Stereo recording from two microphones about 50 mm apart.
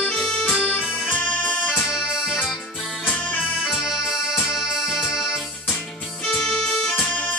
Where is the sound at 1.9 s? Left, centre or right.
Centre.